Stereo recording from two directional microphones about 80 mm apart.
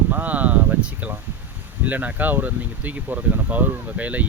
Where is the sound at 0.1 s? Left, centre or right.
Right.